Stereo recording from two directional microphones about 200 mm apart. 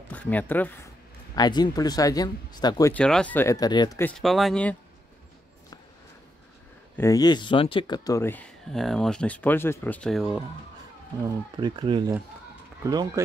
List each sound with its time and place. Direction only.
0.1 s speech: 10° left (ahead or behind)
1.3 s speech: 20° left (ahead or behind)
2.9 s speech: 5° left (ahead or behind); by 4.0 s 20° left (ahead or behind)
4.0 s speech: centre (ahead or behind)
7.0 s speech: 15° left (ahead or behind); by 10.4 s centre (ahead or behind)
11.2 s speech: 25° right (ahead or behind)